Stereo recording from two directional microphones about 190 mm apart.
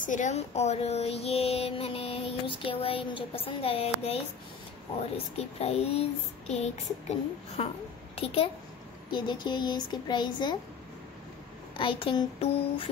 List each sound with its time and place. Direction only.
0.0 s speech: 40° left (ahead or behind)
9.1 s speech: 25° left (ahead or behind)
11.8 s speech: 25° left (ahead or behind)